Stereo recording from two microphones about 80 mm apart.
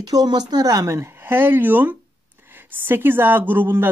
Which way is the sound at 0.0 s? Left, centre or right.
Right.